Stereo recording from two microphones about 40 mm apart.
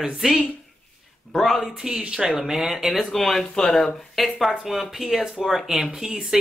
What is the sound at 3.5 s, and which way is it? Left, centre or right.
Speech, centre.